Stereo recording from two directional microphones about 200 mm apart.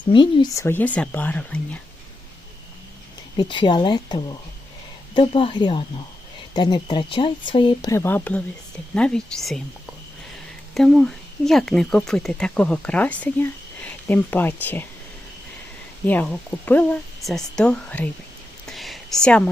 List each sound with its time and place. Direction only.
0.0 s speech: 25° left (ahead or behind); by 1.6 s 5° left (ahead or behind)
3.3 s speech: 25° left (ahead or behind); by 9.6 s centre (ahead or behind)
10.8 s speech: centre (ahead or behind)
16.0 s speech: 5° left (ahead or behind)